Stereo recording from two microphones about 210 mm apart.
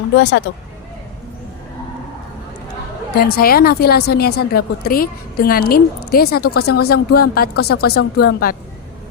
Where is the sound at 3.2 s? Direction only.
45° left (ahead or behind).